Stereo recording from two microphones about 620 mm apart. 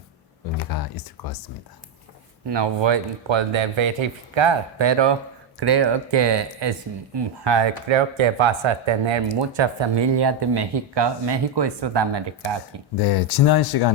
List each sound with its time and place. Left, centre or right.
2.5 s speech: right
13.0 s speech: left